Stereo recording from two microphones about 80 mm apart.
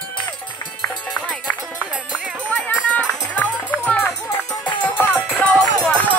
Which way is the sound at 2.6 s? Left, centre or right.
Centre.